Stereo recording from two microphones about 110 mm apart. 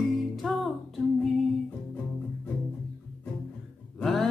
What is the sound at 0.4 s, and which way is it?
Music, centre (ahead or behind).